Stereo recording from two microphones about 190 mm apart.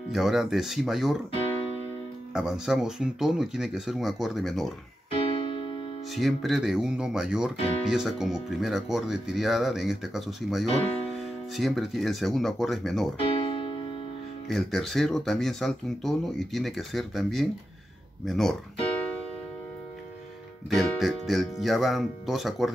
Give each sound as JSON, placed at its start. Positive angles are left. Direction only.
{"t": 0.1, "sound": "speech", "side_deg": 0}
{"t": 2.3, "sound": "speech", "side_deg": -5}
{"t": 5.4, "sound": "music", "side_deg": 25}
{"t": 6.1, "sound": "speech", "side_deg": 0}
{"t": 13.4, "sound": "keyboard", "side_deg": 25}
{"t": 14.5, "sound": "speech", "side_deg": 0}
{"t": 20.7, "sound": "speech", "side_deg": 0}